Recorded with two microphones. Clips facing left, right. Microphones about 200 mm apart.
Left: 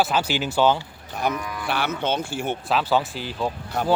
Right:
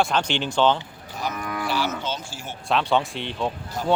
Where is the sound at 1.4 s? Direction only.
60° right (ahead or behind).